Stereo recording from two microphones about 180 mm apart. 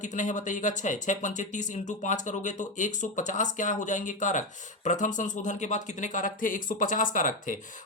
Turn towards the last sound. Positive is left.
turn(degrees=45)  # may be behind; listen again after turning